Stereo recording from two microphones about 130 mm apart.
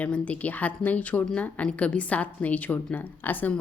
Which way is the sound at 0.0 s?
10° left (ahead or behind).